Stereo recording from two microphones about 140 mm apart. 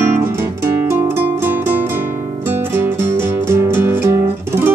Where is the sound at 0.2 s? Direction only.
15° right (ahead or behind).